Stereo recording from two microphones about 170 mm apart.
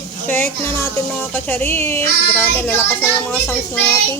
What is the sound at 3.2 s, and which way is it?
Speech, 10° left (ahead or behind).